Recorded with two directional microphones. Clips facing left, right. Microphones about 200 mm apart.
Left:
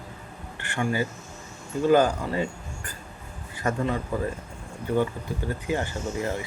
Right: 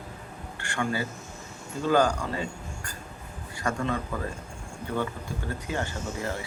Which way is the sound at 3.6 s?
20° left (ahead or behind).